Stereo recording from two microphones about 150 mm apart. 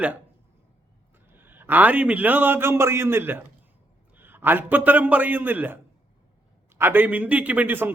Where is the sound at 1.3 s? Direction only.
15° right (ahead or behind).